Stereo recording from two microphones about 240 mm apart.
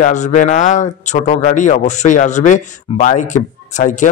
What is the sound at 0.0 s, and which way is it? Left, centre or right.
Speech, left.